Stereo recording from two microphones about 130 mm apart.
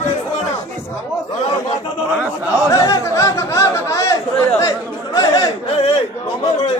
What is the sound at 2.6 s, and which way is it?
Speech, 25° left (ahead or behind).